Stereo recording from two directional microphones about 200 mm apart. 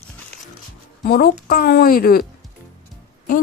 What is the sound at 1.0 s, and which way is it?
Speech, 50° left (ahead or behind).